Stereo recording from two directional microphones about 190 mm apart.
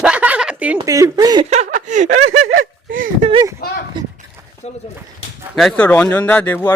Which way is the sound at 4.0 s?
25° right (ahead or behind).